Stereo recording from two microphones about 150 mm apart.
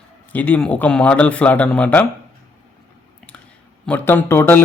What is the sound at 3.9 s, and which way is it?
Speech, 15° left (ahead or behind).